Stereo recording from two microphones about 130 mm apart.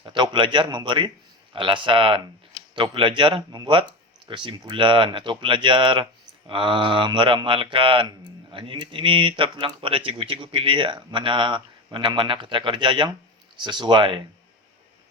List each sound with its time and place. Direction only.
0.0 s speech: 40° right (ahead or behind)